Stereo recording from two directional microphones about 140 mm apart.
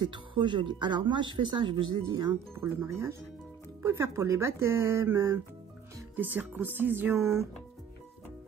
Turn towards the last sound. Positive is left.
turn(degrees=-20)  # may be behind; listen again after turning